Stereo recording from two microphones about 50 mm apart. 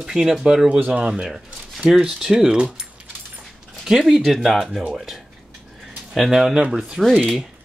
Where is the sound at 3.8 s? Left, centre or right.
Centre.